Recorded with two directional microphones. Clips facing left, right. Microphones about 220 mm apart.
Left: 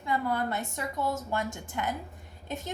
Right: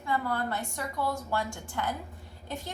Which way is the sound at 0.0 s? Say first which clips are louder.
Left 1 dB; 20° left (ahead or behind).